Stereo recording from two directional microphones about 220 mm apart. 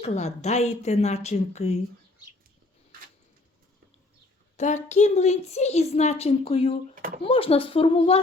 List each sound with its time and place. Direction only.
0.0 s speech: 30° left (ahead or behind)
4.5 s a woman's voice: 30° left (ahead or behind)
6.9 s speech: 45° right (ahead or behind)
7.3 s speech: 25° left (ahead or behind)